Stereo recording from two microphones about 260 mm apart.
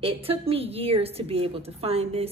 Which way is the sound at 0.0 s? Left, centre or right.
Right.